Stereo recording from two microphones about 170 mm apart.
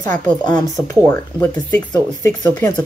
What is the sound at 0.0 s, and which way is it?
Speech, 20° left (ahead or behind).